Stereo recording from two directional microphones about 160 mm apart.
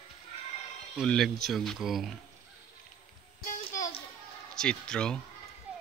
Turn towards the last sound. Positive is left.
turn(degrees=5)  # may be behind; listen again after turning